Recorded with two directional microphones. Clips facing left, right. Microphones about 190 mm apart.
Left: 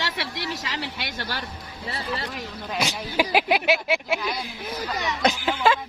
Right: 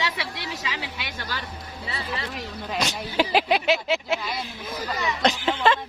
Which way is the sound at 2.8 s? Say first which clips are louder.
Even; 5° left (ahead or behind).